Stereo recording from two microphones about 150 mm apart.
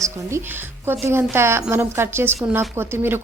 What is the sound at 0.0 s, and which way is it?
A woman's voice, 20° right (ahead or behind).